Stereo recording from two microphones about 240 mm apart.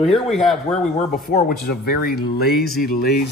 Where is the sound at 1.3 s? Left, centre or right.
Left.